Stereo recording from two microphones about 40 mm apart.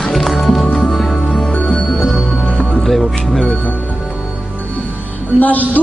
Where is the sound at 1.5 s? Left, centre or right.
Left.